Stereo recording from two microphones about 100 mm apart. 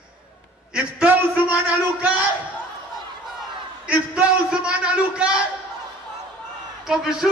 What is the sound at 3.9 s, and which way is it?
A man's voice, 15° right (ahead or behind).